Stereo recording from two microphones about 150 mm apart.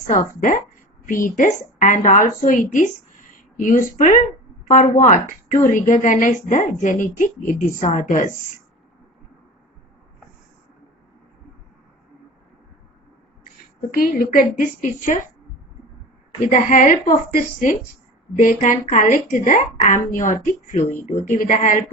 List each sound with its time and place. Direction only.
0.1 s a woman's voice: 60° left (ahead or behind)
13.9 s a woman's voice: 70° left (ahead or behind)
16.5 s a woman's voice: 55° left (ahead or behind)